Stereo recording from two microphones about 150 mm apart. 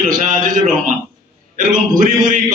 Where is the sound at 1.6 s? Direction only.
65° right (ahead or behind).